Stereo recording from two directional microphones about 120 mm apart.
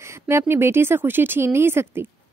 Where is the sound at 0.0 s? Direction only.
20° right (ahead or behind).